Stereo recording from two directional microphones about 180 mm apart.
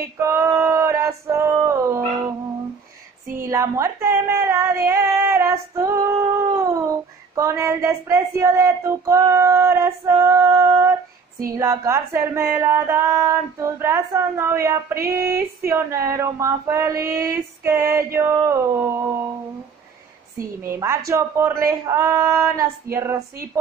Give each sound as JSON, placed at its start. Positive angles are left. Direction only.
{"t": 0.2, "sound": "music", "side_deg": -15}
{"t": 3.3, "sound": "music", "side_deg": -15}
{"t": 20.6, "sound": "music", "side_deg": -15}